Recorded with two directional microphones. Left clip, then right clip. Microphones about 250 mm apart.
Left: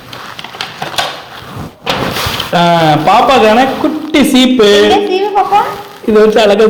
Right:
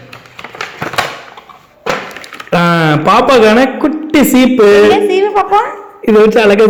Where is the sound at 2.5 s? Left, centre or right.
Right.